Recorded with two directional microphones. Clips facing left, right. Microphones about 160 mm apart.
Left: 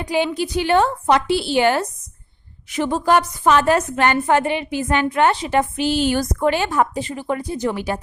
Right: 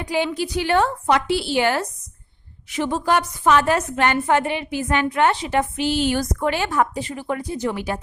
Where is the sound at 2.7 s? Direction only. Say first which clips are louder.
Left 3 dB; 40° left (ahead or behind).